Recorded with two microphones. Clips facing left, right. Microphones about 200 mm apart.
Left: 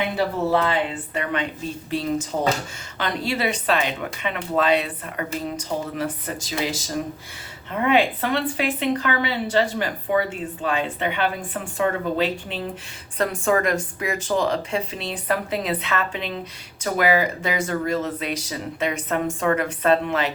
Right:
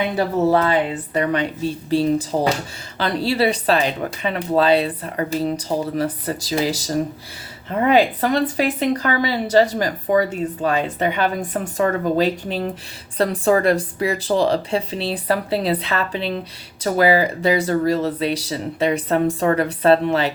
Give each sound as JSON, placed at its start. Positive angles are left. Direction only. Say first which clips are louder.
{"t": 1.1, "sound": "speech", "louder": "right 8 dB", "side_deg": -40}